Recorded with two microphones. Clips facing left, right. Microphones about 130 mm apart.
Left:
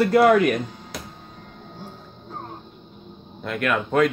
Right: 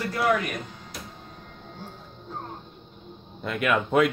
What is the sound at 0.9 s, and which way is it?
Music, 90° left.